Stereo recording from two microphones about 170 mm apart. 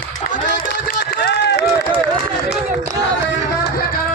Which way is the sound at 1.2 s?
85° left.